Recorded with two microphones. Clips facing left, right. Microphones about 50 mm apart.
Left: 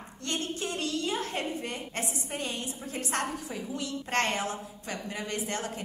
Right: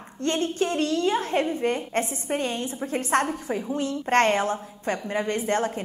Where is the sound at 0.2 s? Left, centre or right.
Right.